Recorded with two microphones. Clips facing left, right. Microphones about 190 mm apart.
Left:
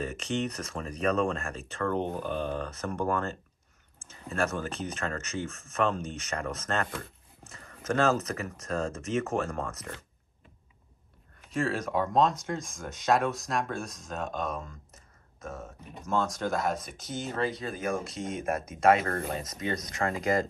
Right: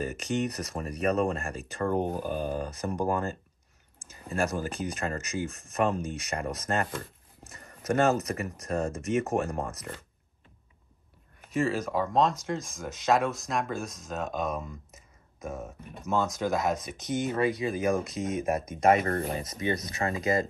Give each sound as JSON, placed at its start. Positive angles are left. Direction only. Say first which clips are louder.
{"t": 0.0, "sound": "speech", "louder": "right 2 dB", "side_deg": -10}
{"t": 11.5, "sound": "speech", "louder": "right 1 dB", "side_deg": 0}
{"t": 19.0, "sound": "speech", "louder": "right 3 dB", "side_deg": -25}
{"t": 19.4, "sound": "speech", "louder": "right 3 dB", "side_deg": -10}